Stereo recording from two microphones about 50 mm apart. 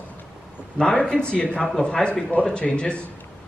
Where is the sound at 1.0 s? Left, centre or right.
Centre.